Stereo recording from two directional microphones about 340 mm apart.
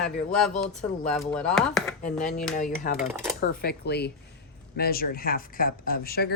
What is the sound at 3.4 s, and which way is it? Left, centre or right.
Speech, left.